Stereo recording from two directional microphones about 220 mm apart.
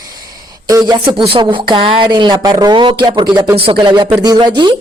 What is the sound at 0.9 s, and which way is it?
Speech, 20° right (ahead or behind).